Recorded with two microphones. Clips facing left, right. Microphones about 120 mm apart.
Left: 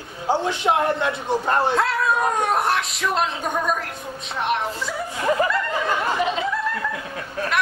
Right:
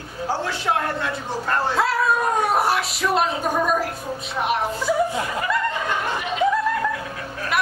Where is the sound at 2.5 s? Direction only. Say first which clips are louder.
Right 1 dB; 5° right (ahead or behind).